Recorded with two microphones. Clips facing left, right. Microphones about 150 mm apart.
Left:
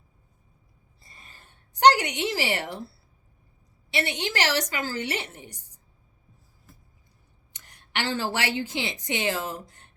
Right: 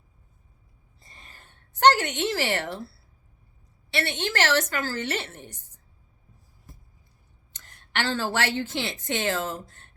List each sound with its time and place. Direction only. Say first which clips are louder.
1.5 s speech: left 1 dB; 15° left (ahead or behind)
3.9 s a woman's voice: right 1 dB; 15° left (ahead or behind)
7.5 s a woman's voice: right 2 dB; 15° left (ahead or behind)